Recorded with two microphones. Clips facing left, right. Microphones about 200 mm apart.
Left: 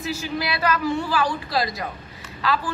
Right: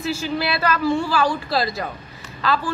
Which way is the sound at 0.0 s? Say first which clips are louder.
Right 3 dB; 15° left (ahead or behind).